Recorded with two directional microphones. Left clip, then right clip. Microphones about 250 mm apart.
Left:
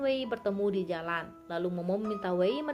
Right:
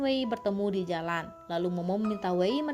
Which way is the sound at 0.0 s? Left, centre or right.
Right.